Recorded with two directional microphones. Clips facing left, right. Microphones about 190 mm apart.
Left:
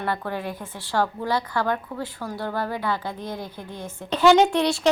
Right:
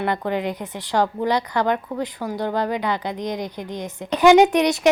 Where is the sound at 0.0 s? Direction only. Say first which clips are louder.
Right 5 dB; 20° right (ahead or behind).